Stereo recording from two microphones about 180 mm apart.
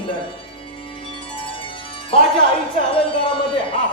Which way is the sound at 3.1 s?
30° left (ahead or behind).